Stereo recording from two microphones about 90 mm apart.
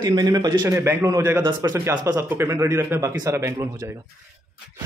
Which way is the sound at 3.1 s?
40° right (ahead or behind).